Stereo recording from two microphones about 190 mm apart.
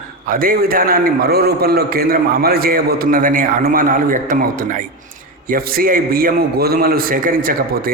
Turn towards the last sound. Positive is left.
turn(degrees=-50)  # may be behind; listen again after turning